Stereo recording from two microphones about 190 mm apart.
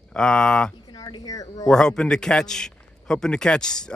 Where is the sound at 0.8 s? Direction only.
20° left (ahead or behind).